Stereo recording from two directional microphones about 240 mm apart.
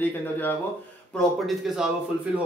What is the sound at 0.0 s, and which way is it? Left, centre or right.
A man's voice, centre.